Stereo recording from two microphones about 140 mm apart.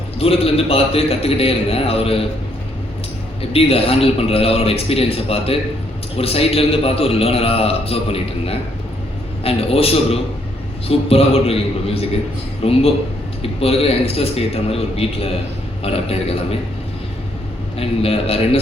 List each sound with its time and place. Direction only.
0.2 s a man's voice: 45° left (ahead or behind)
3.5 s a man's voice: 45° left (ahead or behind)
17.7 s a man's voice: 45° left (ahead or behind)